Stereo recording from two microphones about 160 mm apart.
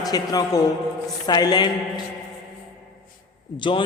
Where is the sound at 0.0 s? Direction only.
25° left (ahead or behind).